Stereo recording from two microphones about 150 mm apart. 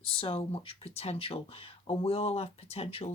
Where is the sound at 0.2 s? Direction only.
40° left (ahead or behind).